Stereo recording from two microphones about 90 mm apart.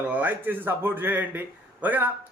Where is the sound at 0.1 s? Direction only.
20° right (ahead or behind).